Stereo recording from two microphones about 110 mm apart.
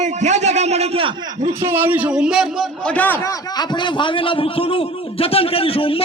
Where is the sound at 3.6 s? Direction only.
45° left (ahead or behind).